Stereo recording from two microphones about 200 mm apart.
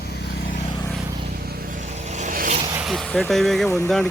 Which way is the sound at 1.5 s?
40° right (ahead or behind).